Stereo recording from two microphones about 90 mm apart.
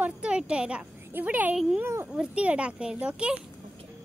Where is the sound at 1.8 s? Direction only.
30° right (ahead or behind).